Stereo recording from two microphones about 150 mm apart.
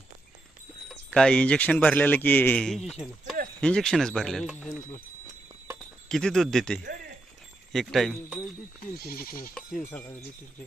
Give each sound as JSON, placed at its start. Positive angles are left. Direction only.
{"t": 0.9, "sound": "speech", "side_deg": 5}
{"t": 6.1, "sound": "speech", "side_deg": 5}
{"t": 8.8, "sound": "speech", "side_deg": 85}
{"t": 9.6, "sound": "speech", "side_deg": 5}